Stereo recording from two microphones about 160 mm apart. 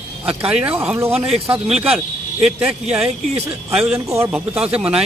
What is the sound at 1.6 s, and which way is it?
Speech, 40° right (ahead or behind).